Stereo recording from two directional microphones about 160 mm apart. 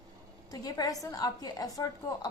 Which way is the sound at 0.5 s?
25° left (ahead or behind).